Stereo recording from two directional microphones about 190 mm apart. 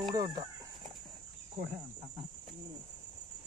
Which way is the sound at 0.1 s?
20° right (ahead or behind).